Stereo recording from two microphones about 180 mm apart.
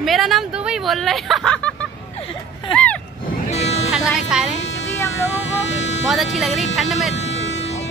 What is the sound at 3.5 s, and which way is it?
Music, 35° left (ahead or behind).